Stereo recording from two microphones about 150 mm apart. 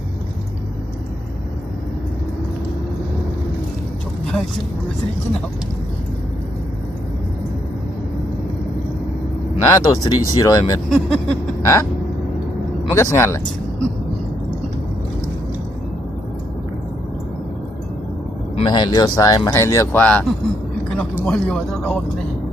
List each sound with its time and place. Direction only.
9.6 s speech: 25° left (ahead or behind)
10.9 s speech: 5° left (ahead or behind)
11.6 s a sound: 20° left (ahead or behind)
12.9 s speech: 20° left (ahead or behind)
18.5 s speech: 30° left (ahead or behind)
20.0 s speech: 10° left (ahead or behind)